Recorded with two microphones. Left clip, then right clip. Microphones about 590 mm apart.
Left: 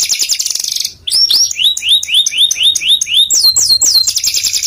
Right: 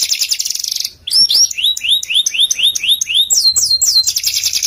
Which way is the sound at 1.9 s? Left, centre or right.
Right.